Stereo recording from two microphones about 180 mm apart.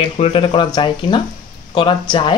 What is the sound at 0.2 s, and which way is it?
Speech, 30° left (ahead or behind).